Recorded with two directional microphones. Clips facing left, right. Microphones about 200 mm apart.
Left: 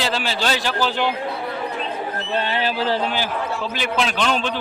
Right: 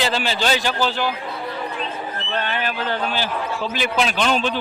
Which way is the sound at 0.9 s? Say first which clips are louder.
Left 1 dB; 20° left (ahead or behind).